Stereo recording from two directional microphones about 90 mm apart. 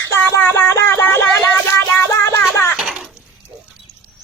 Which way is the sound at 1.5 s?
25° left (ahead or behind).